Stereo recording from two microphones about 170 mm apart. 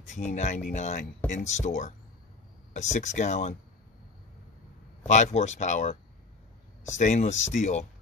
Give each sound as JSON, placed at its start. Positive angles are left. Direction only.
{"t": 0.1, "sound": "speech", "side_deg": 45}
{"t": 5.0, "sound": "speech", "side_deg": 45}
{"t": 7.0, "sound": "speech", "side_deg": 45}